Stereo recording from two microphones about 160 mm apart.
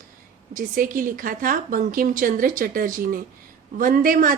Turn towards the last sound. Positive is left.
turn(degrees=-60)  # may be behind; listen again after turning